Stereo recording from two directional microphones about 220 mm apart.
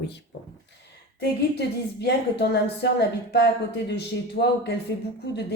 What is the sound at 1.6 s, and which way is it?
Speech, 50° left (ahead or behind).